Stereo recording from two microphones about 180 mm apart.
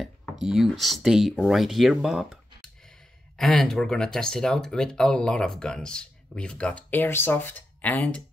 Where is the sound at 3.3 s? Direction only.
5° left (ahead or behind).